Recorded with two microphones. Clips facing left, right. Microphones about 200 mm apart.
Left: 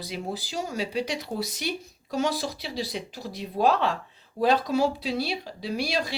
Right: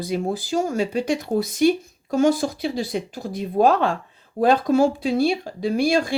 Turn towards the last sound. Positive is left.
turn(degrees=-50)  # may be behind; listen again after turning